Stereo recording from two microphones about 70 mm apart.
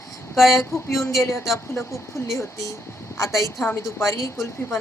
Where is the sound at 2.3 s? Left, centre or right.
Left.